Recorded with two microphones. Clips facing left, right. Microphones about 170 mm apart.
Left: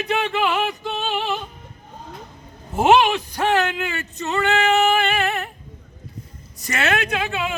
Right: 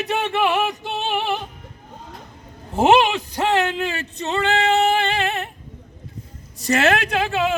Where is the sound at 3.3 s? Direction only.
25° right (ahead or behind).